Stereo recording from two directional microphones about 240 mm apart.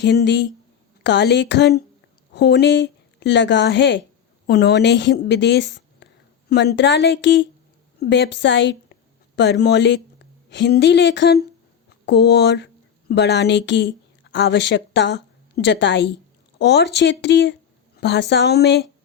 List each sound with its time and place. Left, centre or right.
0.0 s a woman's voice: left